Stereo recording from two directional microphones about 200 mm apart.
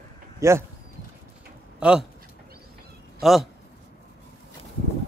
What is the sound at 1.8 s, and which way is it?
Speech, 5° right (ahead or behind).